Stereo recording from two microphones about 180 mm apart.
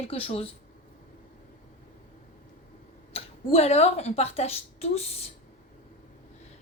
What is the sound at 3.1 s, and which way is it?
A woman's voice, 35° left (ahead or behind).